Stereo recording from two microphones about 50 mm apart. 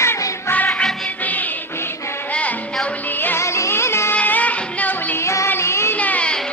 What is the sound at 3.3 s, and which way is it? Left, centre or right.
Music, left.